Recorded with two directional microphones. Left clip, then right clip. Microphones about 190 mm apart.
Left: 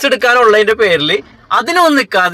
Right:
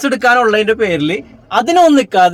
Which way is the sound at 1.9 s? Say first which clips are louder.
Right 1 dB; 35° left (ahead or behind).